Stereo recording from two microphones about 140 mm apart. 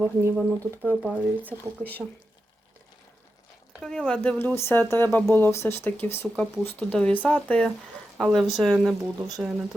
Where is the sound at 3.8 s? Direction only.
5° left (ahead or behind).